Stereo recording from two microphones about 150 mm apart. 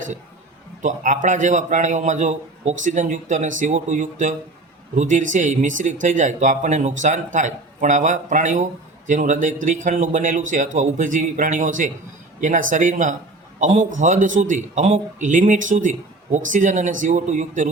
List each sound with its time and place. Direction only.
0.8 s a man's voice: 55° right (ahead or behind)